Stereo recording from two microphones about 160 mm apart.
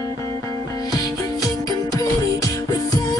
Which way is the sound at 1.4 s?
20° left (ahead or behind).